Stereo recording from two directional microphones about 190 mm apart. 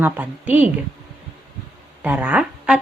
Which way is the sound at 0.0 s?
10° right (ahead or behind).